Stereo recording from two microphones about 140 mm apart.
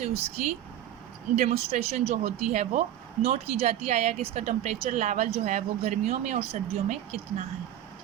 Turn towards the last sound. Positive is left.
turn(degrees=-45)  # may be behind; listen again after turning